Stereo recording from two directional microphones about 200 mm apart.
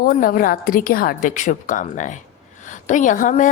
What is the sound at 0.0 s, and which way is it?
A woman's voice, 45° left (ahead or behind).